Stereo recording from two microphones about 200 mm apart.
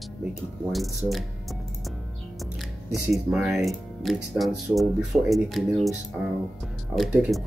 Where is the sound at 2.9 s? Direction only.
Centre (ahead or behind).